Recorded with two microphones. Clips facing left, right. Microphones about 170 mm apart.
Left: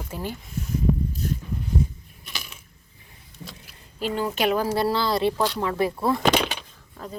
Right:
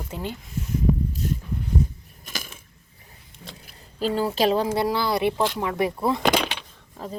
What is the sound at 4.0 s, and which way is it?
Speech, 35° right (ahead or behind).